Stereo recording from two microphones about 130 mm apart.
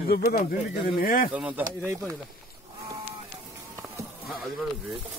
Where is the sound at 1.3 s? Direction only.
10° right (ahead or behind).